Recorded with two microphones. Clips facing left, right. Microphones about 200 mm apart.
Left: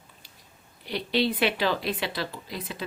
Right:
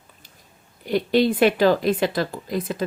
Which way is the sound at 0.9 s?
50° right (ahead or behind).